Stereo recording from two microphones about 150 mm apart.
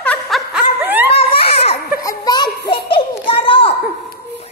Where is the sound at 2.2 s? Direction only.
30° left (ahead or behind).